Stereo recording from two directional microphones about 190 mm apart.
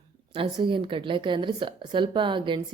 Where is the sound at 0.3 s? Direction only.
25° right (ahead or behind).